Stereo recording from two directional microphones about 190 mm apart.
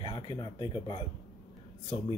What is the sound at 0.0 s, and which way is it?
Speech, 25° left (ahead or behind).